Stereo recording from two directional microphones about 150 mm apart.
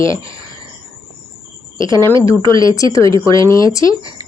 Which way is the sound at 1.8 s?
30° right (ahead or behind).